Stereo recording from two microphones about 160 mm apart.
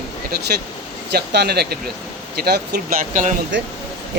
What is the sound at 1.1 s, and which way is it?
Speech, 90° right.